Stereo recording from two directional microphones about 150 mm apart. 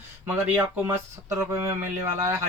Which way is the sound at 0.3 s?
15° right (ahead or behind).